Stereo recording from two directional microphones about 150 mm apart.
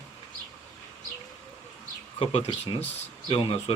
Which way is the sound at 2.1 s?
35° left (ahead or behind).